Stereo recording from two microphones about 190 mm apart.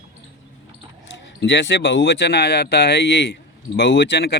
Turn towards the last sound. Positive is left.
turn(degrees=60)  # may be behind; listen again after turning